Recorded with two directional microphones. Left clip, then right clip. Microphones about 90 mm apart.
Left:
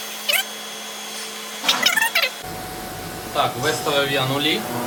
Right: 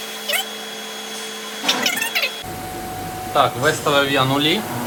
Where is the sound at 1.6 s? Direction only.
20° left (ahead or behind).